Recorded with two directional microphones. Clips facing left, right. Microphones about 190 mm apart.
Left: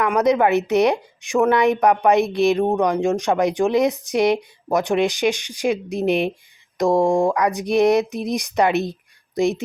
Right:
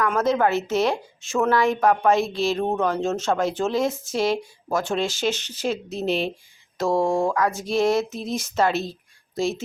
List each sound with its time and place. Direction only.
0.0 s a woman's voice: 15° left (ahead or behind)